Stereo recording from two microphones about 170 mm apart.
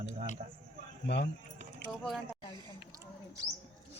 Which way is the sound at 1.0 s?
85° left.